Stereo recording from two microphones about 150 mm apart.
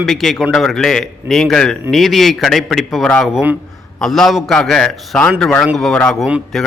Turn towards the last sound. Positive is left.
turn(degrees=0)  # may be behind; listen again after turning